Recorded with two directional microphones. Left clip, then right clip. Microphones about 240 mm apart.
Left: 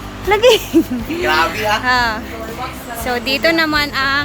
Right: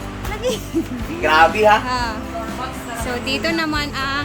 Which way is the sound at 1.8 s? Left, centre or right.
Centre.